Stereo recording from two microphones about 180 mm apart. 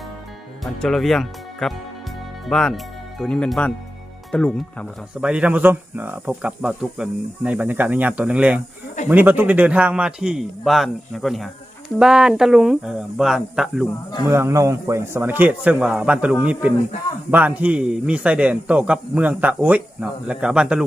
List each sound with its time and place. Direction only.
0.6 s a man's voice: centre (ahead or behind)
14.3 s speech: 15° right (ahead or behind)